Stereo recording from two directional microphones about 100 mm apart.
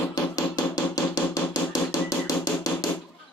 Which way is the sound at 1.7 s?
40° left (ahead or behind).